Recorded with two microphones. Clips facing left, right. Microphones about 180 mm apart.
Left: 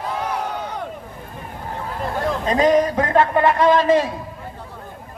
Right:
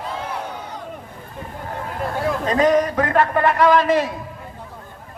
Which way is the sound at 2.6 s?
25° left (ahead or behind).